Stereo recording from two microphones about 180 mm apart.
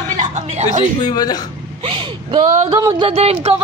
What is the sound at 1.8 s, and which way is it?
Speech, 30° right (ahead or behind).